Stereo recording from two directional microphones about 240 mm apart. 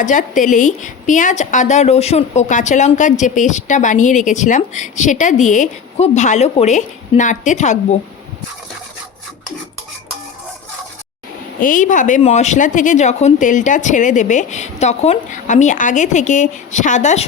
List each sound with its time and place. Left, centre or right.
0.0 s a woman's voice: left
11.6 s a woman's voice: left